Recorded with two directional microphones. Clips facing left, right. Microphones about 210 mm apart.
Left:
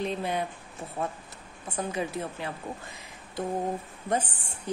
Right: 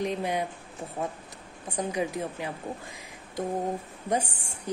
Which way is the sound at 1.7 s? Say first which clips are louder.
Right 2 dB; 15° right (ahead or behind).